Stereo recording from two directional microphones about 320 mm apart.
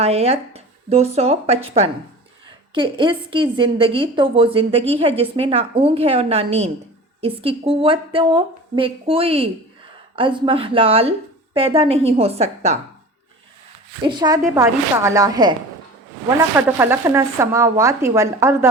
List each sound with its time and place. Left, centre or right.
0.0 s a woman's voice: centre
14.0 s a woman's voice: centre
16.6 s a woman's voice: centre